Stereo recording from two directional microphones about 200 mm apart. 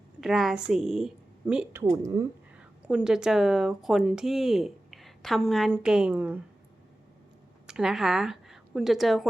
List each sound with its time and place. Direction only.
0.2 s a woman's voice: centre (ahead or behind)
1.8 s a woman's voice: 15° right (ahead or behind)
2.6 s speech: 5° right (ahead or behind)
7.7 s a woman's voice: 5° right (ahead or behind)